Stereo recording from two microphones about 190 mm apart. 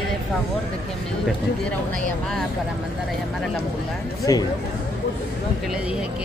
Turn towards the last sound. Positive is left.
turn(degrees=20)  # may be behind; listen again after turning